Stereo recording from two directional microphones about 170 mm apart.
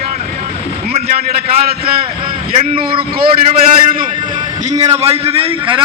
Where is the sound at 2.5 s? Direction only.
35° right (ahead or behind).